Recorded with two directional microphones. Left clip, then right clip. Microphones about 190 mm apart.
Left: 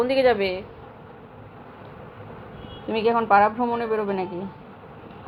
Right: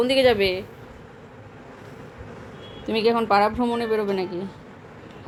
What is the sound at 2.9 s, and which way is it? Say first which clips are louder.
Speech: left 1 dB; 35° right (ahead or behind).